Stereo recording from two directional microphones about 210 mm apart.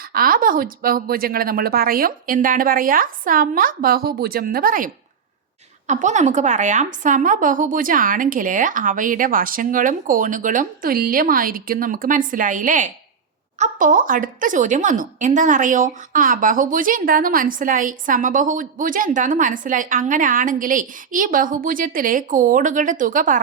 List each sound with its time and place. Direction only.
0.1 s a woman's voice: 45° right (ahead or behind)
5.9 s a woman's voice: 35° right (ahead or behind)